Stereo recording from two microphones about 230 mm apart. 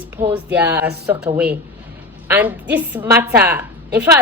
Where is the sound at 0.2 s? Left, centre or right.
Centre.